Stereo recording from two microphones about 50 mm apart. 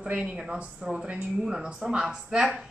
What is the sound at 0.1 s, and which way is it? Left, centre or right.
A woman's voice, right.